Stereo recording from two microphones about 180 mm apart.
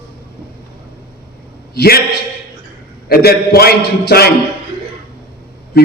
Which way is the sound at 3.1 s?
60° left (ahead or behind).